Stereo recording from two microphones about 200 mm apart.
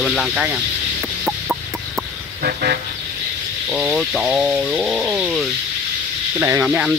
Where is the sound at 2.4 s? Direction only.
50° right (ahead or behind).